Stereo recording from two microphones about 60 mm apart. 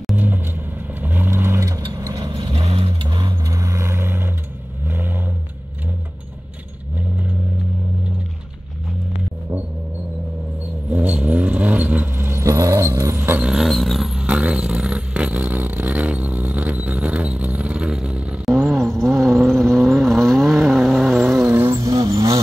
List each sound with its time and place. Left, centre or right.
0.1 s vehicle: right
1.7 s vehicle: right
7.0 s vehicle: right
10.9 s vehicle: centre
12.1 s vehicle: right
12.4 s vehicle: right
13.1 s a sound: right
13.6 s vehicle: centre
14.1 s a sound: centre
18.0 s vehicle: centre
18.4 s vehicle: centre
21.6 s vehicle: right